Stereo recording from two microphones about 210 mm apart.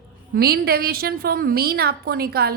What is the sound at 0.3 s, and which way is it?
A woman's voice, 45° right (ahead or behind).